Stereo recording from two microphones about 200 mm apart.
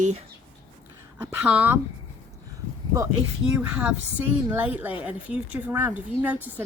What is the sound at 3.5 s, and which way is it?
Speech, 5° right (ahead or behind).